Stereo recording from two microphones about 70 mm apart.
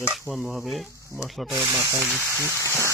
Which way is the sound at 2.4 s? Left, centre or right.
Right.